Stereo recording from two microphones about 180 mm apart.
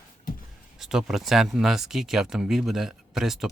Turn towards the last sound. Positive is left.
turn(degrees=0)  # may be behind; listen again after turning